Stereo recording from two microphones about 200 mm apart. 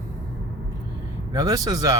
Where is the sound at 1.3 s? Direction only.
20° right (ahead or behind).